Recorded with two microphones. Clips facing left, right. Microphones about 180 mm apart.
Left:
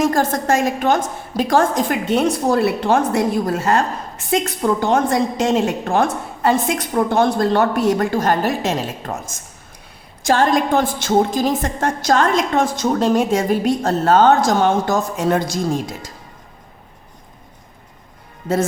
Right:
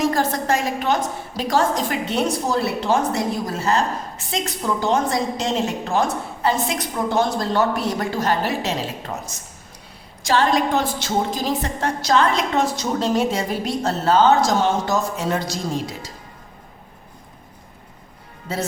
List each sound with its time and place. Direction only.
0.0 s a woman's voice: 45° left (ahead or behind)